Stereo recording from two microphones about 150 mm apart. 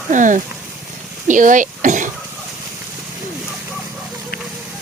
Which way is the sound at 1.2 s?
60° right (ahead or behind).